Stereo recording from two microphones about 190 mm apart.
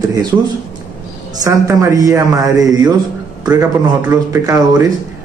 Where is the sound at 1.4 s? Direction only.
15° right (ahead or behind).